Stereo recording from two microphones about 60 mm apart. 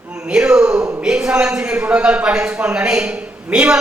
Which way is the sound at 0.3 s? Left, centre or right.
Centre.